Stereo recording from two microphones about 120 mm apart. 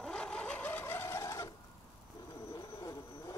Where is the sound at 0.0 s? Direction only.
5° left (ahead or behind); by 1.5 s 25° left (ahead or behind).